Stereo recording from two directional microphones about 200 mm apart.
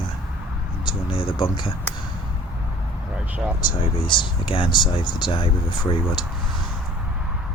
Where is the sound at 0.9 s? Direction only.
25° left (ahead or behind).